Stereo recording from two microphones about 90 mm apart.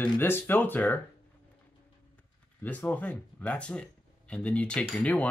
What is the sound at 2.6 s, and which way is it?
Speech, 15° left (ahead or behind).